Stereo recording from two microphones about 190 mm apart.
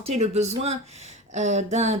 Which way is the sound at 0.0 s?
35° right (ahead or behind).